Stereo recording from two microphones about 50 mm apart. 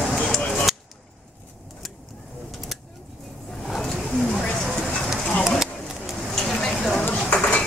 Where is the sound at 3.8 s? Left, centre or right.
Centre.